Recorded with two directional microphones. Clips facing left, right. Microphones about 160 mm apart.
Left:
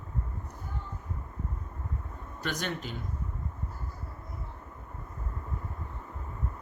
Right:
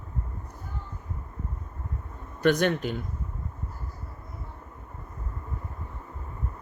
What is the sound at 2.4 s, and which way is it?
Speech, 60° right (ahead or behind).